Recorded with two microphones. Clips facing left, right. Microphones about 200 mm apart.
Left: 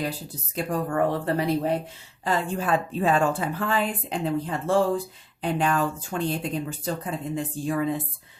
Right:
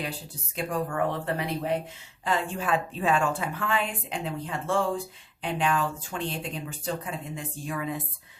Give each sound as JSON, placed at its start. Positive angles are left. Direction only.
{"t": 0.5, "sound": "a woman's voice", "side_deg": 40}